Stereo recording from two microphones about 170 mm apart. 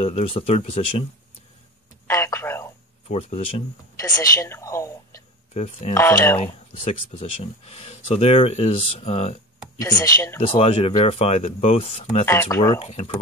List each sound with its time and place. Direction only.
0.0 s speech: 35° left (ahead or behind)
2.0 s telephone: 15° left (ahead or behind)
3.1 s speech: 40° left (ahead or behind)
4.2 s speech: 15° left (ahead or behind)
5.5 s speech: 40° left (ahead or behind)
5.9 s speech: 15° left (ahead or behind)
6.4 s speech: 40° left (ahead or behind)
9.8 s speech: 20° left (ahead or behind)
10.5 s speech: 35° left (ahead or behind)
12.3 s speech: 15° left (ahead or behind)
12.7 s speech: 35° left (ahead or behind)